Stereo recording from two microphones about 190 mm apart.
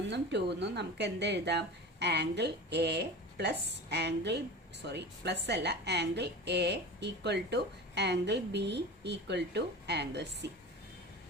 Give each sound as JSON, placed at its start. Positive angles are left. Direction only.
{"t": 0.1, "sound": "a woman's voice", "side_deg": -65}